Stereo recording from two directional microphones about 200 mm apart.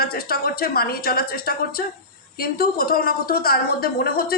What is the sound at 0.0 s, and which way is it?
A woman's voice, 50° left (ahead or behind).